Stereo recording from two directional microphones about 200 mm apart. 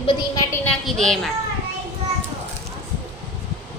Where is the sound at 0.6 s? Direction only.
Centre (ahead or behind).